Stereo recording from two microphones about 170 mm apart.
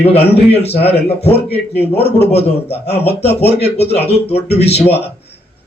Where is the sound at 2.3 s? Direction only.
35° left (ahead or behind).